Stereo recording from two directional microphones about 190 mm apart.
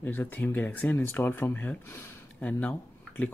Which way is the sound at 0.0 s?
10° left (ahead or behind).